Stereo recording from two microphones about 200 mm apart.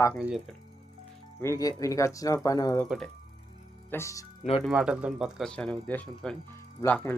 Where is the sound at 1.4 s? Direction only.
15° left (ahead or behind).